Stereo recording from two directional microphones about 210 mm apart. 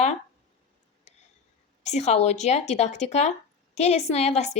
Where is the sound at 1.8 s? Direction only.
35° left (ahead or behind).